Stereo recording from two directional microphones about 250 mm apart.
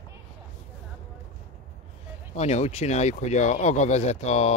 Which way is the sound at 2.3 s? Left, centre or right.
Left.